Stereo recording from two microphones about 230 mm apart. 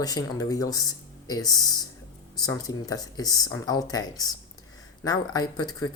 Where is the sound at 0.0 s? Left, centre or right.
Centre.